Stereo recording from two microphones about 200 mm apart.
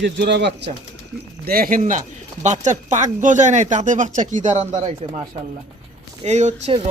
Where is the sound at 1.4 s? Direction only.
45° right (ahead or behind).